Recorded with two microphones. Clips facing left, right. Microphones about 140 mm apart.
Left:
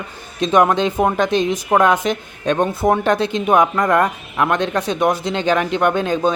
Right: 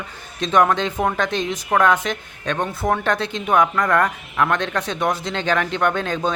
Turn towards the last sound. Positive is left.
turn(degrees=10)  # may be behind; listen again after turning